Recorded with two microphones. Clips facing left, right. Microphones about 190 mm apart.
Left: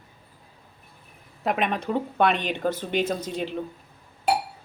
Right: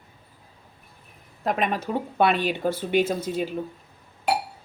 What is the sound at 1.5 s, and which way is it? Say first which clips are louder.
Speech: even; centre (ahead or behind).